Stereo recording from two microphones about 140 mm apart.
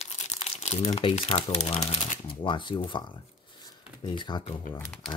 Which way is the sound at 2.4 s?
35° left (ahead or behind).